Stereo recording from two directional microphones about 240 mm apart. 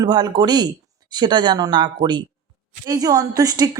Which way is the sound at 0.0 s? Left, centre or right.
Centre.